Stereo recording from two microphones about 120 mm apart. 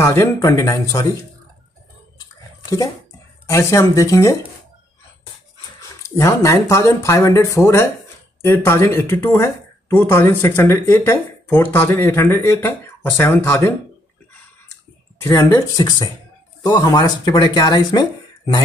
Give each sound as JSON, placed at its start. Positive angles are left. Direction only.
{"t": 0.0, "sound": "speech", "side_deg": 25}
{"t": 3.4, "sound": "speech", "side_deg": 25}
{"t": 5.8, "sound": "speech", "side_deg": 25}
{"t": 15.2, "sound": "speech", "side_deg": 25}